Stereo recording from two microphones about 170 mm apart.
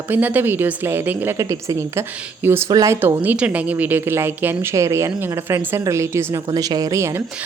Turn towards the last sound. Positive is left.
turn(degrees=-15)  # may be behind; listen again after turning